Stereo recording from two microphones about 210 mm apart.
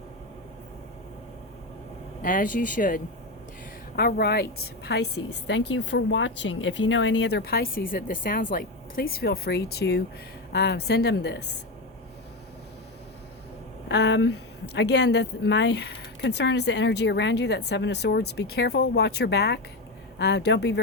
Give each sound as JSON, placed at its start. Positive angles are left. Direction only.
{"t": 2.2, "sound": "speech", "side_deg": 40}
{"t": 13.8, "sound": "speech", "side_deg": 55}